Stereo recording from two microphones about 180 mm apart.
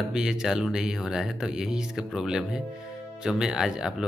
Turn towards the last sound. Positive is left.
turn(degrees=-5)  # may be behind; listen again after turning